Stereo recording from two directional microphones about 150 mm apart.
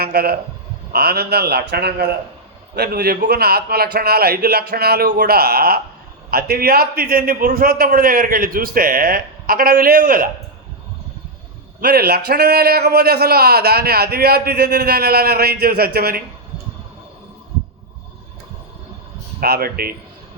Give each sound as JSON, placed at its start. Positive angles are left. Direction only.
{"t": 0.0, "sound": "a man's voice", "side_deg": -90}
{"t": 11.8, "sound": "a man's voice", "side_deg": -90}
{"t": 19.4, "sound": "a man's voice", "side_deg": -90}